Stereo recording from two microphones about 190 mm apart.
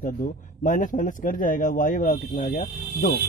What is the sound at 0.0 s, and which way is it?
Speech, 45° left (ahead or behind).